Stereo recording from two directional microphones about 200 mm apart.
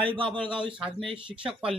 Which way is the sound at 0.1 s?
25° right (ahead or behind).